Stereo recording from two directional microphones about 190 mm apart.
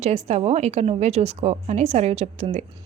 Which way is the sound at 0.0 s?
35° right (ahead or behind).